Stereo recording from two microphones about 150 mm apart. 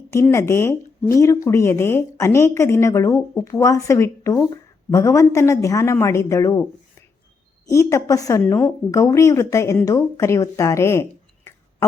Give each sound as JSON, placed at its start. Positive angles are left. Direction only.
{"t": 0.1, "sound": "speech", "side_deg": 20}
{"t": 7.7, "sound": "speech", "side_deg": 20}